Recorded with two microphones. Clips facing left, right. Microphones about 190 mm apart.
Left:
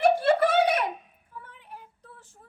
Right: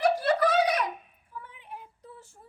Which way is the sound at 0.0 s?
25° left (ahead or behind).